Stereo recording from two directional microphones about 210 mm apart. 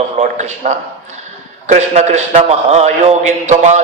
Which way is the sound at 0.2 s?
35° right (ahead or behind).